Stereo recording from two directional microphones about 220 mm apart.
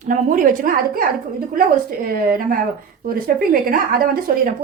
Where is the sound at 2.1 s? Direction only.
40° right (ahead or behind).